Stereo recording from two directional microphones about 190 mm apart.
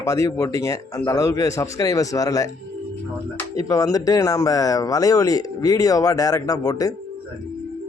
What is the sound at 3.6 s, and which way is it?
Speech, 15° left (ahead or behind).